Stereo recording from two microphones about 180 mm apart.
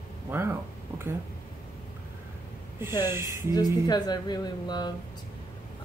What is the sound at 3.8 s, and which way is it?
Speech, 20° left (ahead or behind).